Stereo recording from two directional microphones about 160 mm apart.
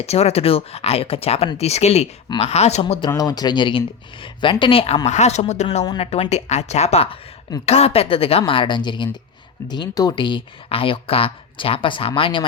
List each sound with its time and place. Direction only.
0.0 s speech: 40° left (ahead or behind)
2.8 s speech: 30° left (ahead or behind)
5.0 s a woman's voice: 45° left (ahead or behind)